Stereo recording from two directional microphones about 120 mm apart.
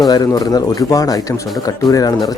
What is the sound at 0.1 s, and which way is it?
Speech, 30° left (ahead or behind).